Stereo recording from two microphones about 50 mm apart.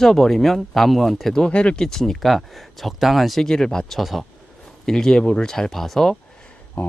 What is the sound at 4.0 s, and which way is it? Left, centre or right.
Speech, centre.